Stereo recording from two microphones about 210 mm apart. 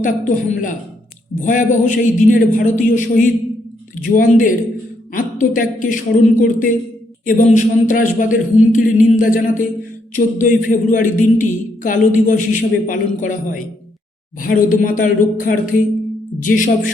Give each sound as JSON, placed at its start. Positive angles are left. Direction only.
{"t": 0.0, "sound": "a man's voice", "side_deg": 40}